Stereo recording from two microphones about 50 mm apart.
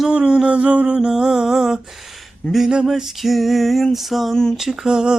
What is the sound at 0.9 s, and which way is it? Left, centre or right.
Mantra, centre.